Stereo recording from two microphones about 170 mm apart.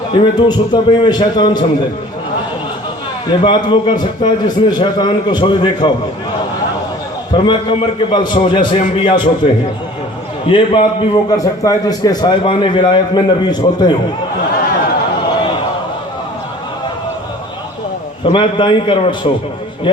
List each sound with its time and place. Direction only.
0.1 s a man's voice: 25° left (ahead or behind)
3.2 s a man's voice: 25° left (ahead or behind)
7.3 s a man's voice: 30° left (ahead or behind)
18.3 s a man's voice: 30° left (ahead or behind)